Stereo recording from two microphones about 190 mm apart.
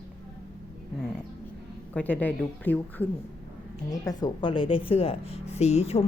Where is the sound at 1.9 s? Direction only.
10° left (ahead or behind).